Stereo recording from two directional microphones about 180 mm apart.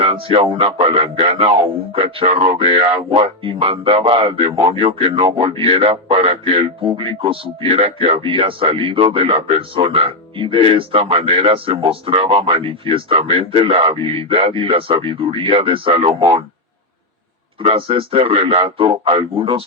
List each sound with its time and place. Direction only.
0.0 s speech: 30° right (ahead or behind)
17.6 s speech: 30° right (ahead or behind)